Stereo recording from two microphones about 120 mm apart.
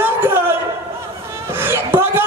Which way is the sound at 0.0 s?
15° right (ahead or behind).